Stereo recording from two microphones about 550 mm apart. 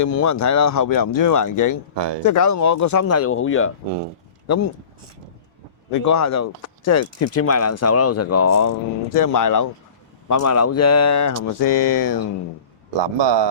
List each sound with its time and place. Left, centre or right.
0.0 s speech: left
5.9 s speech: left
13.0 s a man's voice: right